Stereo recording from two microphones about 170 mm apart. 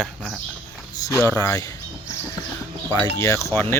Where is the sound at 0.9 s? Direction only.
15° left (ahead or behind).